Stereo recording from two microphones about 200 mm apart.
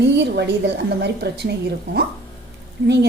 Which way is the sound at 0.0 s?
60° right (ahead or behind).